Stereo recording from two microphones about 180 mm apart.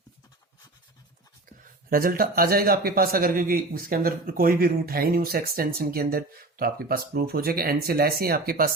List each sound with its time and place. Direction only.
1.9 s a man's voice: 50° right (ahead or behind)